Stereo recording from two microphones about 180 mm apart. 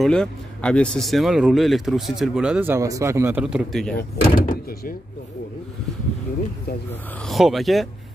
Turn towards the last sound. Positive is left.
turn(degrees=0)  # may be behind; listen again after turning